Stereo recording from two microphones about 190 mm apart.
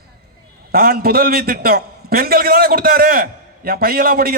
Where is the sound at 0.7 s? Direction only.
50° right (ahead or behind).